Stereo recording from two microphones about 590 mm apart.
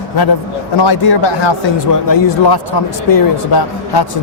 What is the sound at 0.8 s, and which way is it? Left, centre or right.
A man's voice, left.